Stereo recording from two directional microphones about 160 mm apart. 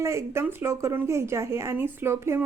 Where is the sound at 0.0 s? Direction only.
15° right (ahead or behind).